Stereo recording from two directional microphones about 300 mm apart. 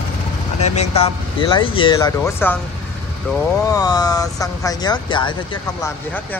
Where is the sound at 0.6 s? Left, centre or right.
Left.